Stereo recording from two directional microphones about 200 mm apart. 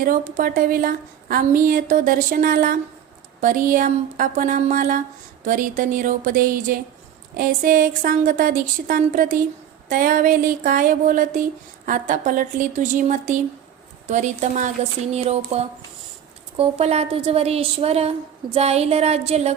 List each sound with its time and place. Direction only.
0.0 s a woman's voice: 45° right (ahead or behind)
14.1 s speech: 40° right (ahead or behind)